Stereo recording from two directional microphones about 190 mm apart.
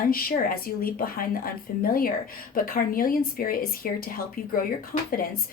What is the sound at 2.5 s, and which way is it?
Speech, 50° left (ahead or behind).